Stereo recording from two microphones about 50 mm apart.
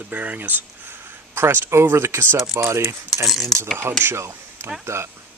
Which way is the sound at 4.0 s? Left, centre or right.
Right.